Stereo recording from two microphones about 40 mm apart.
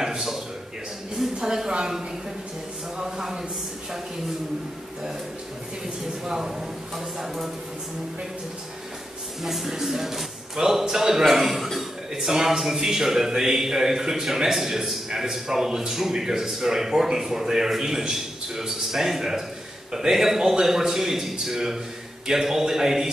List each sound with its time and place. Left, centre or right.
0.0 s speech: centre
6.2 s speech: centre
9.4 s speech: centre